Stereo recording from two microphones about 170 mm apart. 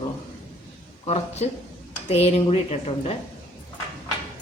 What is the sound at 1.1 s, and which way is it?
Speech, 35° left (ahead or behind).